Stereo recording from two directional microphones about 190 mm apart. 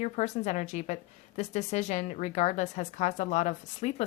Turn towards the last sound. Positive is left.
turn(degrees=35)  # may be behind; listen again after turning